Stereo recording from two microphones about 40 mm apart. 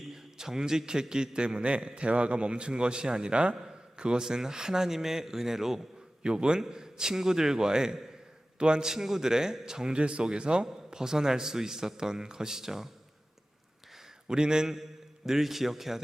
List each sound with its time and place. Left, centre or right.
0.1 s a man's voice: centre
3.9 s a sound: right
4.2 s a man's voice: centre
6.2 s a man's voice: right
9.9 s a man's voice: right; by 12.9 s centre
14.3 s a man's voice: centre